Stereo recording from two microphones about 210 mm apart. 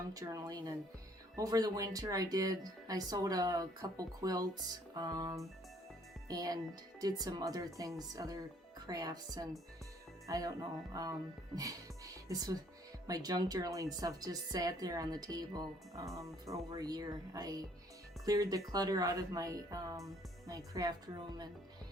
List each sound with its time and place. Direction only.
0.1 s speech: 15° right (ahead or behind)